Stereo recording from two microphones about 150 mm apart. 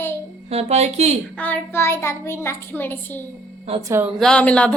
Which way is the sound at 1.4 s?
15° left (ahead or behind).